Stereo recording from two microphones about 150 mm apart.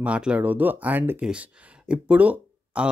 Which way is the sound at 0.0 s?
5° right (ahead or behind).